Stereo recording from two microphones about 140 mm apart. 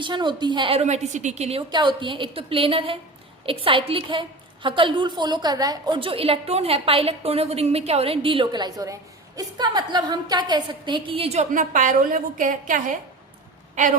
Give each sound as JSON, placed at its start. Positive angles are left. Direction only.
{"t": 0.0, "sound": "a woman's voice", "side_deg": -35}
{"t": 0.8, "sound": "a woman's voice", "side_deg": -50}
{"t": 1.7, "sound": "a woman's voice", "side_deg": -35}
{"t": 6.0, "sound": "a woman's voice", "side_deg": -40}
{"t": 11.5, "sound": "a woman's voice", "side_deg": -70}